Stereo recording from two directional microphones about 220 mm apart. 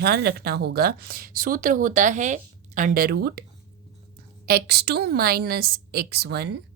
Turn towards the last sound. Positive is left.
turn(degrees=-45)  # may be behind; listen again after turning